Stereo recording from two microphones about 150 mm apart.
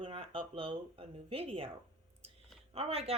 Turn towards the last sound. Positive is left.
turn(degrees=-40)  # may be behind; listen again after turning